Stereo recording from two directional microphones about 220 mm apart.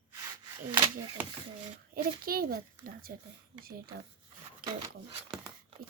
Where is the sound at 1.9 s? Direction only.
40° right (ahead or behind).